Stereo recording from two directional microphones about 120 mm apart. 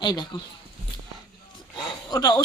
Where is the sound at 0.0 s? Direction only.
40° left (ahead or behind).